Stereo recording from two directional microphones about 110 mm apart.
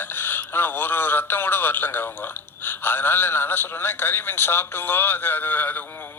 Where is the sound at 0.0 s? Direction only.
20° left (ahead or behind).